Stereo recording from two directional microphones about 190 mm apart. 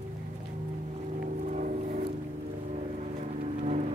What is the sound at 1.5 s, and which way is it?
Music, 40° right (ahead or behind).